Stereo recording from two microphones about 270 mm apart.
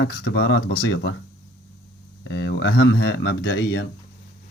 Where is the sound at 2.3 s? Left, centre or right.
Left.